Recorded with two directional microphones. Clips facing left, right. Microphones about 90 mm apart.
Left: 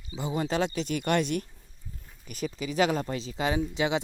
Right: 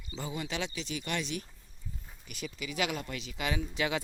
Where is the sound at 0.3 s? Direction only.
40° left (ahead or behind).